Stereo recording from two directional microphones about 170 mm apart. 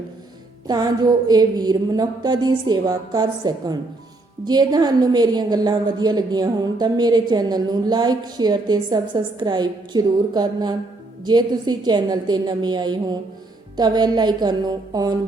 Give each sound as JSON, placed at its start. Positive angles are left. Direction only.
{"t": 0.7, "sound": "a woman's voice", "side_deg": -25}